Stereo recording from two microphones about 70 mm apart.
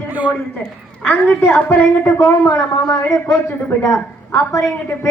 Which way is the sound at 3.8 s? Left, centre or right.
Left.